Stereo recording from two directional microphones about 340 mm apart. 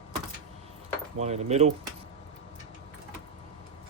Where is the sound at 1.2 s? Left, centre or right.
Centre.